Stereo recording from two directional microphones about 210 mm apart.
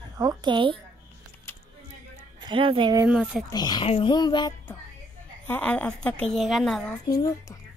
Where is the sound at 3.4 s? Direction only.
20° left (ahead or behind).